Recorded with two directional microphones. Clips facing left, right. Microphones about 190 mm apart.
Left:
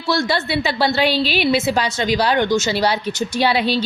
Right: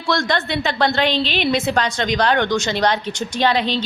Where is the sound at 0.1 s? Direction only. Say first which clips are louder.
Left 1 dB; 5° left (ahead or behind).